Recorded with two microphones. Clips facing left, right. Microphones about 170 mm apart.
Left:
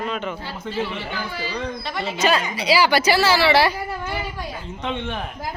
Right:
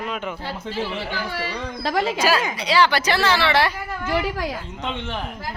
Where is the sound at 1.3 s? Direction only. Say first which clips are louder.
Left 1 dB; 65° right (ahead or behind); by 2.1 s 90° right.